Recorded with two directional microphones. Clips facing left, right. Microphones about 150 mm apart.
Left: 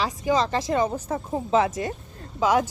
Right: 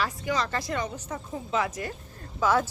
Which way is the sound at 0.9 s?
35° left (ahead or behind).